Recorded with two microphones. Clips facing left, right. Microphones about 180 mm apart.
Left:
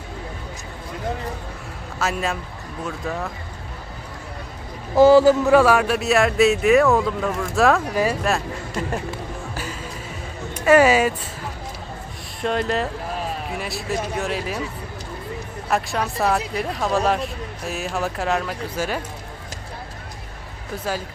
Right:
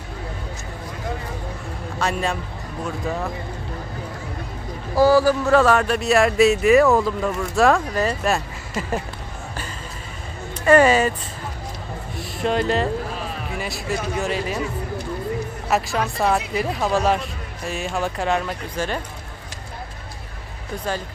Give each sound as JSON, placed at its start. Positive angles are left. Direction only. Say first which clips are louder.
{"t": 2.0, "sound": "speech", "louder": "right 1 dB", "side_deg": 0}
{"t": 4.9, "sound": "a man's voice", "louder": "left 3 dB", "side_deg": 20}
{"t": 5.5, "sound": "speech", "louder": "left 1 dB", "side_deg": 10}
{"t": 10.7, "sound": "speech", "louder": "even", "side_deg": 10}
{"t": 12.4, "sound": "speech", "louder": "right 2 dB", "side_deg": 0}
{"t": 15.7, "sound": "speech", "louder": "right 1 dB", "side_deg": 0}